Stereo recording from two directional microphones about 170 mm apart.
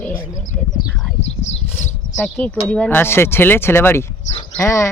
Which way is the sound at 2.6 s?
5° left (ahead or behind).